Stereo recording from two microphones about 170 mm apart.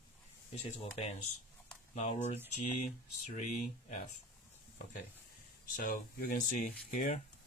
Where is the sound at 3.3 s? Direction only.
45° left (ahead or behind).